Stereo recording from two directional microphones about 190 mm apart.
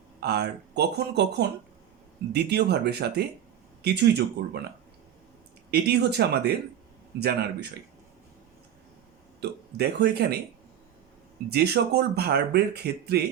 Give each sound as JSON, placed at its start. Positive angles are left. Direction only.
{"t": 0.2, "sound": "speech", "side_deg": -55}
{"t": 5.7, "sound": "speech", "side_deg": -60}
{"t": 9.4, "sound": "speech", "side_deg": -60}
{"t": 11.5, "sound": "speech", "side_deg": -60}